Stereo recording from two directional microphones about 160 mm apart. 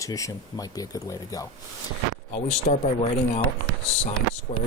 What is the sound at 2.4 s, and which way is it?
Speech, 45° left (ahead or behind).